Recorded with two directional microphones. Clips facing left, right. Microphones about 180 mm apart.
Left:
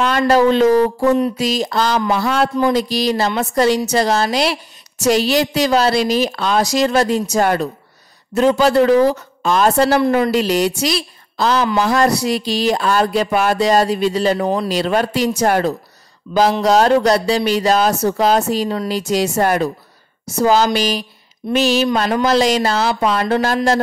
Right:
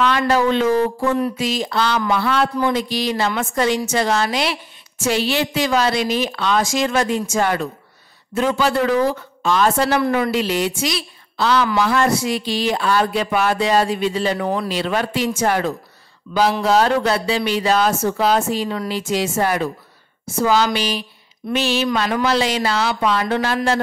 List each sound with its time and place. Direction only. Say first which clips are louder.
0.0 s a woman's voice: left 4 dB; 40° left (ahead or behind)
14.4 s speech: left 3 dB; 25° left (ahead or behind)
14.7 s a woman's voice: left 4 dB; 40° left (ahead or behind)
16.3 s speech: left 4 dB; 25° left (ahead or behind)
16.6 s a woman's voice: left 5 dB; 40° left (ahead or behind)